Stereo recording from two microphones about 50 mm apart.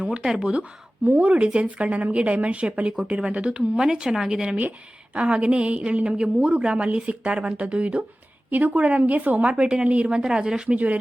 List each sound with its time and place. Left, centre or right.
0.2 s a woman's voice: centre
2.9 s a woman's voice: centre
8.4 s a woman's voice: right
10.2 s speech: centre